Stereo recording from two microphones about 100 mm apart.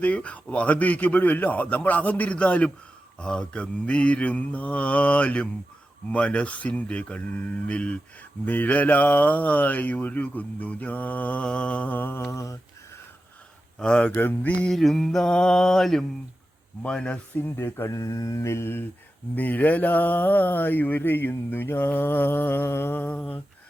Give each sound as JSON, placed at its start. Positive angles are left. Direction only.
{"t": 0.0, "sound": "speech", "side_deg": 15}
{"t": 12.3, "sound": "mantra", "side_deg": 30}
{"t": 13.7, "sound": "speech", "side_deg": 10}
{"t": 14.7, "sound": "mantra", "side_deg": 0}
{"t": 16.8, "sound": "speech", "side_deg": 10}
{"t": 17.3, "sound": "a sound", "side_deg": 20}
{"t": 17.9, "sound": "mantra", "side_deg": 35}
{"t": 19.4, "sound": "a sound", "side_deg": 15}